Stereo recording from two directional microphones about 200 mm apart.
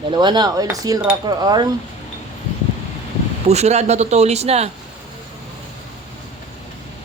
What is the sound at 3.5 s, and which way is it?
Speech, 35° right (ahead or behind).